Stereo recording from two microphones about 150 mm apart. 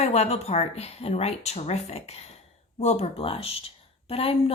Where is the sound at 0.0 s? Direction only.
45° left (ahead or behind).